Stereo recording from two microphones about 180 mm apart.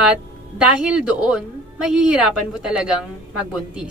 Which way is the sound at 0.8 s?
5° right (ahead or behind).